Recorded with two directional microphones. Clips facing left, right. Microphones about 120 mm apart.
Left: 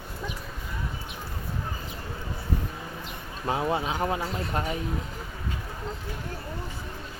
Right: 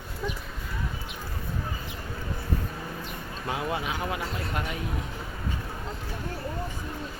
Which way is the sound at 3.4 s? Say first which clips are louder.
Left 4 dB; 30° left (ahead or behind).